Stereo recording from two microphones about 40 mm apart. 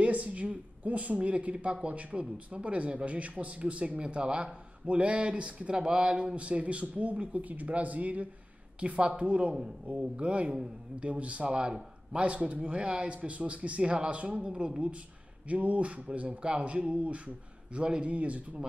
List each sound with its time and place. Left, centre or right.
0.0 s a woman's voice: right